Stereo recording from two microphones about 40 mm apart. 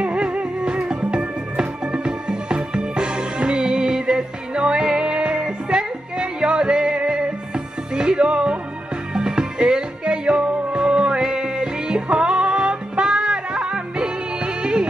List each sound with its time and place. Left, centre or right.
0.0 s music: right